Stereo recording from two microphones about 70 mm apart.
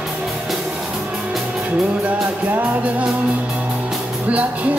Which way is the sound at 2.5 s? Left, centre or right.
Right.